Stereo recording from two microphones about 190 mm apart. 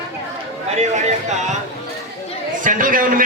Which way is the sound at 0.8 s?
35° right (ahead or behind).